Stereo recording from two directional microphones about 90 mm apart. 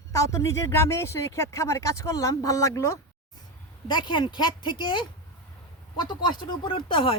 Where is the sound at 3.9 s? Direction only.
60° left (ahead or behind).